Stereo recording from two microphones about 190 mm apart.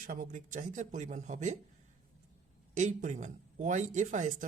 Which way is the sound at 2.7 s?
40° right (ahead or behind).